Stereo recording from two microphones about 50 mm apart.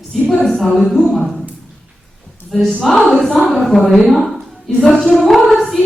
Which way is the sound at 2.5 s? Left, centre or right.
Centre.